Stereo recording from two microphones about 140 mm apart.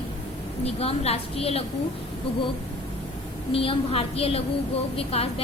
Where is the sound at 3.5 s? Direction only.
40° left (ahead or behind).